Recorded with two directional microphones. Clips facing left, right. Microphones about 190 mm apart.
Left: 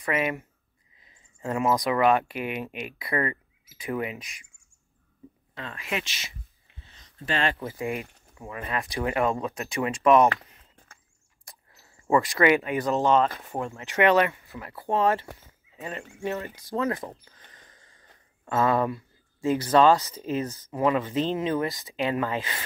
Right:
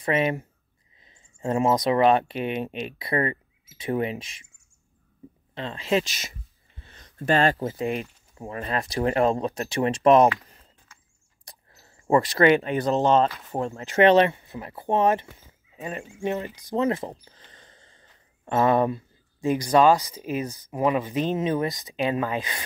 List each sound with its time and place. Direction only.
0.0 s speech: 25° right (ahead or behind)
5.5 s speech: 30° right (ahead or behind)
6.0 s speech: 45° right (ahead or behind)
6.8 s a sound: 55° right (ahead or behind)
7.6 s speech: 20° right (ahead or behind)
8.4 s speech: 35° right (ahead or behind)
11.4 s speech: 35° right (ahead or behind); by 22.6 s 15° right (ahead or behind)